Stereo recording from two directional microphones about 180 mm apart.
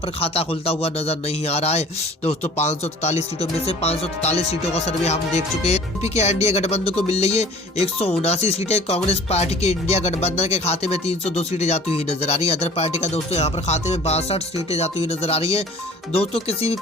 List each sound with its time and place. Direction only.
0.2 s speech: 35° left (ahead or behind)